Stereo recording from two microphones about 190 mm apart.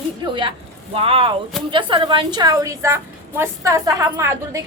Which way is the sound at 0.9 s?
30° right (ahead or behind).